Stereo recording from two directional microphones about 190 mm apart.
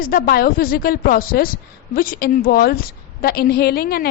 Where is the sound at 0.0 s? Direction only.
50° left (ahead or behind).